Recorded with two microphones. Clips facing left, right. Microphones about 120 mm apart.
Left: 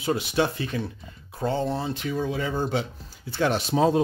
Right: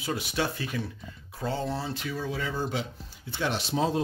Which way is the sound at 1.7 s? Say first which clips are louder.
Left 5 dB; 20° left (ahead or behind).